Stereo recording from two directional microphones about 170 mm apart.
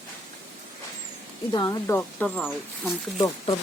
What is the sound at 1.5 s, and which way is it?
Speech, 25° left (ahead or behind).